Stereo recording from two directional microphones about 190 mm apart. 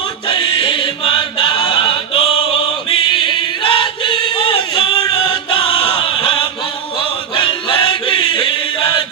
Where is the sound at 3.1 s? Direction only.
25° left (ahead or behind).